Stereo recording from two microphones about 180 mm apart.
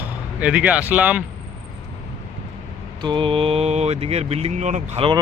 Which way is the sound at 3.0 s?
25° right (ahead or behind).